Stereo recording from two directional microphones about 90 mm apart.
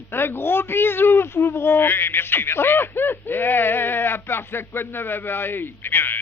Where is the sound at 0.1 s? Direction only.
25° left (ahead or behind).